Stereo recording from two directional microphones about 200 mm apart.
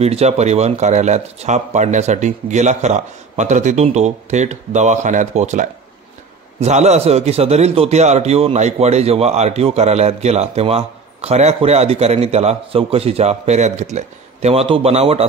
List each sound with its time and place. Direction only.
0.0 s a man's voice: 30° right (ahead or behind)